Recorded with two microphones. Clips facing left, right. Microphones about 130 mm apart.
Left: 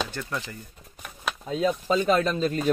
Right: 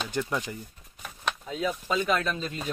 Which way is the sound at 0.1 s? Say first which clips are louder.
Right 3 dB; 15° right (ahead or behind).